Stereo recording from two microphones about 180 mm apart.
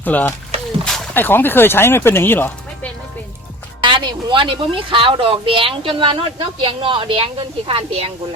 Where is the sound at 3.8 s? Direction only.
25° right (ahead or behind).